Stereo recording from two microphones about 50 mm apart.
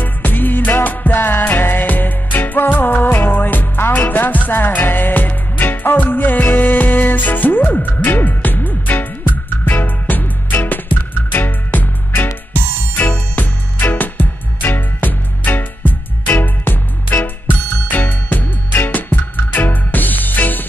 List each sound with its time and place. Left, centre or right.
0.0 s music: left
17.8 s music: left